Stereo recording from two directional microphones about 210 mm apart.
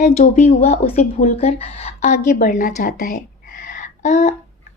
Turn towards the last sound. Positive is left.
turn(degrees=35)  # may be behind; listen again after turning